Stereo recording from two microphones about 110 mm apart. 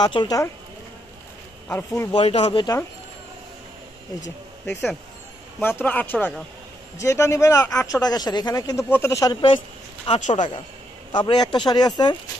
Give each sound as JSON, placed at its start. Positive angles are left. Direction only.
{"t": 0.0, "sound": "speech", "side_deg": 45}
{"t": 1.7, "sound": "speech", "side_deg": 20}
{"t": 2.1, "sound": "speech", "side_deg": 60}
{"t": 5.6, "sound": "speech", "side_deg": 20}
{"t": 7.0, "sound": "speech", "side_deg": 25}
{"t": 8.8, "sound": "speech", "side_deg": 20}
{"t": 9.2, "sound": "speech", "side_deg": 45}
{"t": 10.1, "sound": "speech", "side_deg": 90}
{"t": 11.1, "sound": "speech", "side_deg": 40}